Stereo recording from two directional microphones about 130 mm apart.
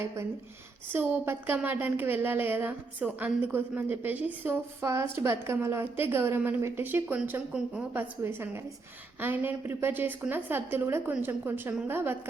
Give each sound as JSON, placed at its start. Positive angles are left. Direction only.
{"t": 0.9, "sound": "a woman's voice", "side_deg": -15}